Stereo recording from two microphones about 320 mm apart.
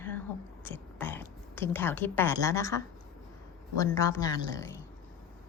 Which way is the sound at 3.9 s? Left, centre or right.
Centre.